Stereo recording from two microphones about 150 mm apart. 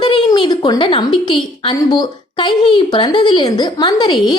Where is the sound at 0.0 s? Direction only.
30° left (ahead or behind).